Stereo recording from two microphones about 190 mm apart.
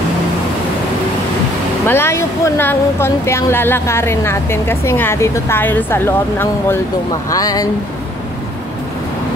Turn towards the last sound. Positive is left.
turn(degrees=20)  # may be behind; listen again after turning